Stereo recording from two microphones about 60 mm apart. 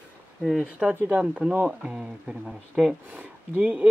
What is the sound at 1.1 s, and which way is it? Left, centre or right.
Speech, right.